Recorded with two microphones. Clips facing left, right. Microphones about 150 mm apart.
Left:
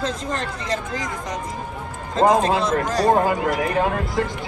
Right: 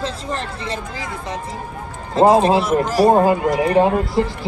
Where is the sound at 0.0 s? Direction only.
30° right (ahead or behind).